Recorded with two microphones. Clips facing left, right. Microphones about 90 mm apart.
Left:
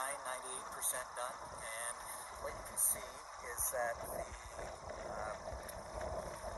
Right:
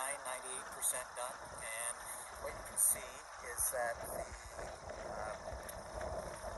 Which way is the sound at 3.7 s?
5° right (ahead or behind).